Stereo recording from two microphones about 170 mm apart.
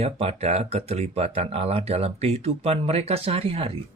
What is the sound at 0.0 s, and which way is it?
Speech, 35° right (ahead or behind).